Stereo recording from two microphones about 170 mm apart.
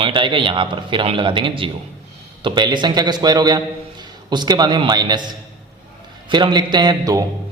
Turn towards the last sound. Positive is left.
turn(degrees=-20)  # may be behind; listen again after turning